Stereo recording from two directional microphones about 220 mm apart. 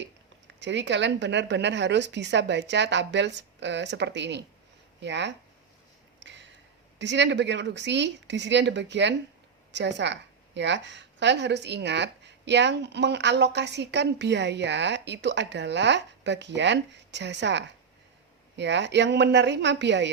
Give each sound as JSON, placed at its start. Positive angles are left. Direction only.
{"t": 0.0, "sound": "a woman's voice", "side_deg": -55}
{"t": 6.1, "sound": "a sound", "side_deg": -55}
{"t": 7.0, "sound": "a woman's voice", "side_deg": -55}